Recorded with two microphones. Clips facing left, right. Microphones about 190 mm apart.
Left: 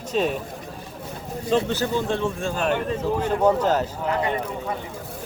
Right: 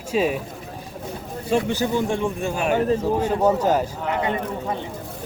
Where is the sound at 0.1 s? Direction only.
10° right (ahead or behind).